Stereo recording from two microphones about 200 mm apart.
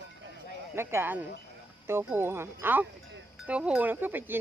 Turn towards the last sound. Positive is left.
turn(degrees=-10)  # may be behind; listen again after turning